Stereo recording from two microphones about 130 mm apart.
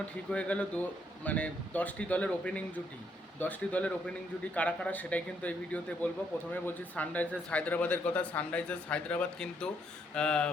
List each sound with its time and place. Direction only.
0.3 s speech: 10° left (ahead or behind)